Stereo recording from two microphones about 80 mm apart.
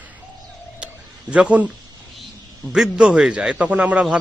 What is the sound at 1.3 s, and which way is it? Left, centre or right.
Speech, centre.